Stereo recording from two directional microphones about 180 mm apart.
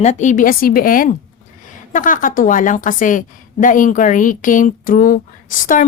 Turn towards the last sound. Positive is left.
turn(degrees=50)  # may be behind; listen again after turning